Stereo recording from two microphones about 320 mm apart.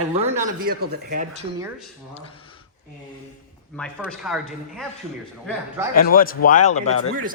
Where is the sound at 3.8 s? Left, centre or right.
Centre.